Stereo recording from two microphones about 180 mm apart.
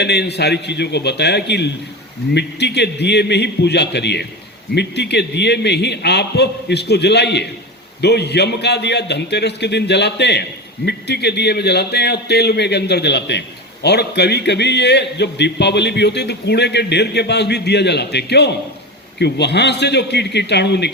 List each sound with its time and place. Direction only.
0.0 s a man's voice: 70° left (ahead or behind)